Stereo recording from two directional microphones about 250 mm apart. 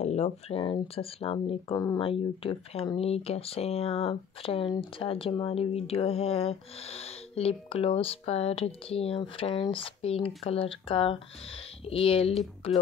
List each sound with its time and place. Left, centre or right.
0.0 s speech: left